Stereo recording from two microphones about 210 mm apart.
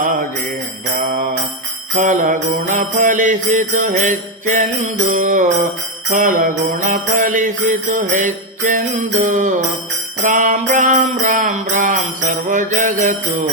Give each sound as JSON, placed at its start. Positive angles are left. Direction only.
{"t": 1.0, "sound": "jingle bell", "side_deg": -40}
{"t": 2.0, "sound": "mantra", "side_deg": -35}
{"t": 10.2, "sound": "jingle bell", "side_deg": -40}